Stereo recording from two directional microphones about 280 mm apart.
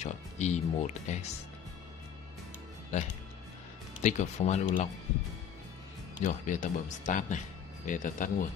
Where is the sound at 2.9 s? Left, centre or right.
Left.